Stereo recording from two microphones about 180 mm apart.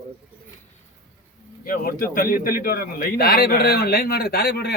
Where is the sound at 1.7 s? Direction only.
55° left (ahead or behind).